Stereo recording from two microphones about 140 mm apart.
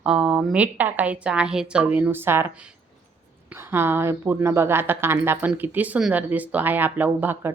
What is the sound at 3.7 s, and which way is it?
Speech, 15° right (ahead or behind).